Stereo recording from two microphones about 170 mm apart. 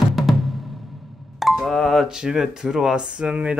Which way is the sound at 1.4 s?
Centre (ahead or behind).